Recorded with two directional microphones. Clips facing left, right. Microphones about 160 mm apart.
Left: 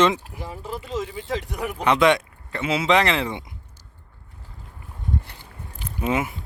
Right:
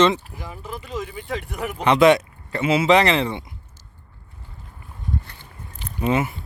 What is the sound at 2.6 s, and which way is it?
Speech, 5° right (ahead or behind).